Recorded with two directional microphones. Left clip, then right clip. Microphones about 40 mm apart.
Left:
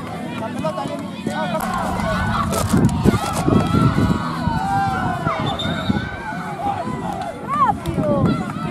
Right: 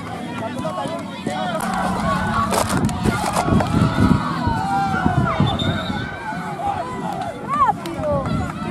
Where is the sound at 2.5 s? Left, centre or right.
Centre.